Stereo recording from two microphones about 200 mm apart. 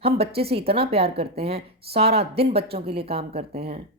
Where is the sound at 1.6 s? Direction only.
55° right (ahead or behind).